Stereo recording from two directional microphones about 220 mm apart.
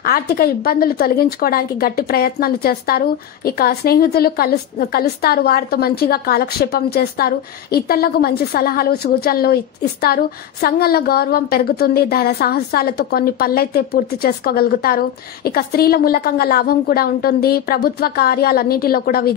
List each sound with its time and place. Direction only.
0.0 s a woman's voice: 45° left (ahead or behind)